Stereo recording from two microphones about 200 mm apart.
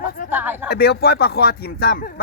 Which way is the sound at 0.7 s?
55° left (ahead or behind).